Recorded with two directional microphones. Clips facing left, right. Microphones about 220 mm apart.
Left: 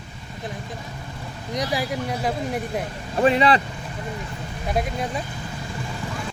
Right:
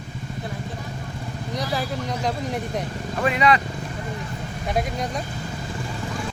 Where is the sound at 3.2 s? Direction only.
30° left (ahead or behind).